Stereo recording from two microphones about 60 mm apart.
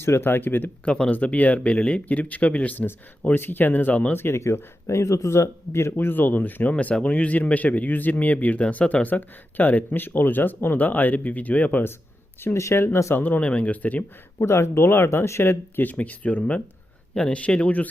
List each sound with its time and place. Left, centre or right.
0.0 s speech: left
0.9 s speech: centre
3.2 s speech: left
4.2 s speech: left
12.5 s speech: left
13.1 s speech: left
14.4 s speech: left